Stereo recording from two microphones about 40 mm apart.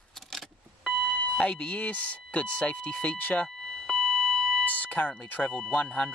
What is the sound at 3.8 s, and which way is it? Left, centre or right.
Beep, centre.